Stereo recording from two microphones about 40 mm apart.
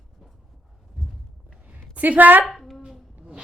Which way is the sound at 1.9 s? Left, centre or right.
Right.